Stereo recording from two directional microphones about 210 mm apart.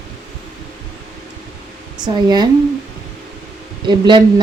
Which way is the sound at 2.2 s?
20° right (ahead or behind).